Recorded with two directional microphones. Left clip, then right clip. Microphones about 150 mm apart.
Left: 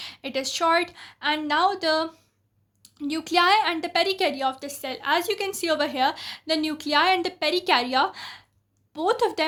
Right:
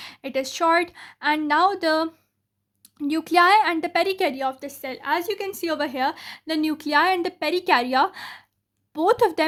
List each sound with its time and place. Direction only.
0.0 s a woman's voice: 40° right (ahead or behind)